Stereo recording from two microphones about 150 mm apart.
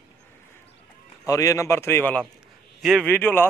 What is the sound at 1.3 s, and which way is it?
A man's voice, 20° left (ahead or behind).